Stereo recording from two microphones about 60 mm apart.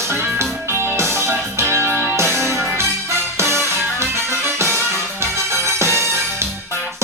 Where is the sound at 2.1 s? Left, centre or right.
Right.